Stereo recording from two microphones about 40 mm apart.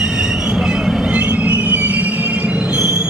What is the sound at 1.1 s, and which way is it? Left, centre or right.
Train, right.